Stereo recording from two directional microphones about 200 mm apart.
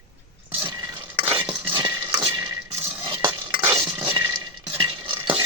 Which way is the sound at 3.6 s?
15° right (ahead or behind).